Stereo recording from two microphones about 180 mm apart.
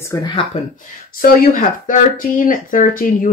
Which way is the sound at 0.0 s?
20° left (ahead or behind).